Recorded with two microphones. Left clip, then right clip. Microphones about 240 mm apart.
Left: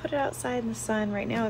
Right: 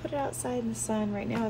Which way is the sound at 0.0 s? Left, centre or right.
Left.